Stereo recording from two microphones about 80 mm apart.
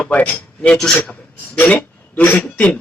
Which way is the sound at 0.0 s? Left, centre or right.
Centre.